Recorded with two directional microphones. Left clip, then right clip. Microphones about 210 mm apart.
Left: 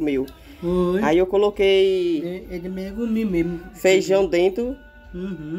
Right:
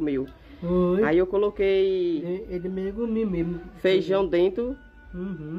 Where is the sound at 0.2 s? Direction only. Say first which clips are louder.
Left 6 dB; 30° right (ahead or behind).